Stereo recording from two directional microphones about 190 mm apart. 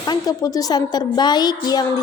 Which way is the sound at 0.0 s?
20° left (ahead or behind).